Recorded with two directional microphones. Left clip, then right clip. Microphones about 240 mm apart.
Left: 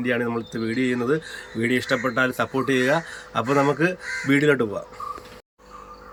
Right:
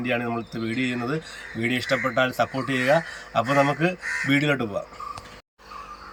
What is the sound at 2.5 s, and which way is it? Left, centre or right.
Speech, left.